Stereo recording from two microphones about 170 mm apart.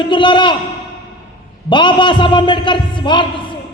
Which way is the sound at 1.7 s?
30° left (ahead or behind).